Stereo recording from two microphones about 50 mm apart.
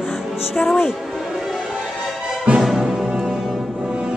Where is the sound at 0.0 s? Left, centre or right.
Centre.